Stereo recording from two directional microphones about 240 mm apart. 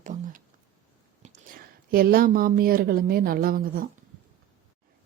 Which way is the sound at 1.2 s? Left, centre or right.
Right.